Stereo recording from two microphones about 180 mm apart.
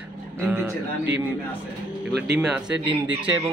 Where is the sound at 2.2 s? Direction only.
5° right (ahead or behind).